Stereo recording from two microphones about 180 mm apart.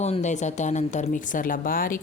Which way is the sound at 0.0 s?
40° left (ahead or behind).